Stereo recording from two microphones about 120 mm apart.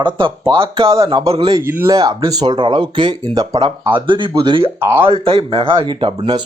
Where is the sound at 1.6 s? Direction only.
20° right (ahead or behind).